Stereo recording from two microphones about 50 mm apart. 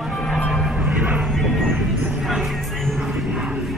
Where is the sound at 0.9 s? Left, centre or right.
Right.